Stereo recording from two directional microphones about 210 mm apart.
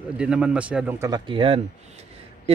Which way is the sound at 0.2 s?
5° right (ahead or behind).